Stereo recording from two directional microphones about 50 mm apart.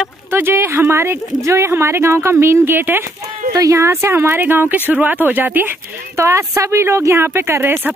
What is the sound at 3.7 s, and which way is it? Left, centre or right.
Speech, right.